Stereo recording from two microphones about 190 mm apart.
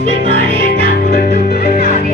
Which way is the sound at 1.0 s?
40° left (ahead or behind).